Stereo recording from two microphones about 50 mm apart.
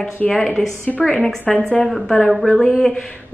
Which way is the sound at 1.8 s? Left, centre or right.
Centre.